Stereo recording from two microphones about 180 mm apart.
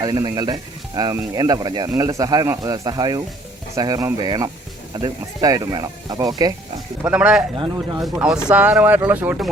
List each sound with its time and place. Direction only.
0.0 s speech: 20° right (ahead or behind)
7.0 s a man's voice: 5° right (ahead or behind)